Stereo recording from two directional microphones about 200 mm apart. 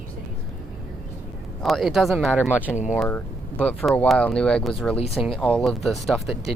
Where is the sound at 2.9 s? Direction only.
10° left (ahead or behind).